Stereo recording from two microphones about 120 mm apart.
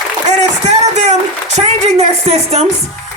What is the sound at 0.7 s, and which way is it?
A woman's voice, 70° right (ahead or behind).